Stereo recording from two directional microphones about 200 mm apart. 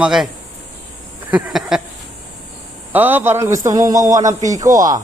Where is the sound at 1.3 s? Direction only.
5° right (ahead or behind).